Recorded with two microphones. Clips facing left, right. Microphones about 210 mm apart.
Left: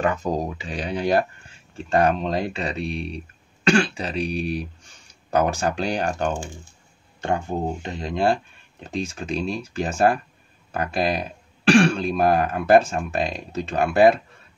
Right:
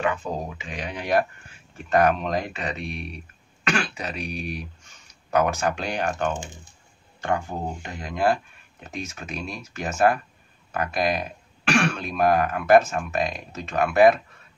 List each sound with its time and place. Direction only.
0.0 s speech: 40° left (ahead or behind)
6.3 s speech: 20° right (ahead or behind)
7.2 s speech: 25° left (ahead or behind)